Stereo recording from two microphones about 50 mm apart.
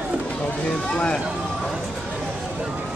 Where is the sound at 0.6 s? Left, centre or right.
Left.